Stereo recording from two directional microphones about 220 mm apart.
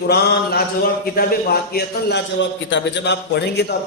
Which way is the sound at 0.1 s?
45° left (ahead or behind).